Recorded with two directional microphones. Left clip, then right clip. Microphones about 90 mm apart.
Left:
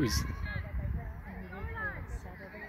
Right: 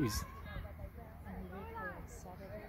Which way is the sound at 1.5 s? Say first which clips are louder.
Left 7 dB; 25° left (ahead or behind).